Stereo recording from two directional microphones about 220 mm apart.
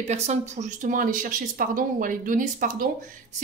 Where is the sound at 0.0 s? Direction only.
30° right (ahead or behind).